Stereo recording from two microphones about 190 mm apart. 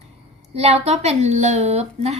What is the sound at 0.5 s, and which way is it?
Speech, 35° right (ahead or behind).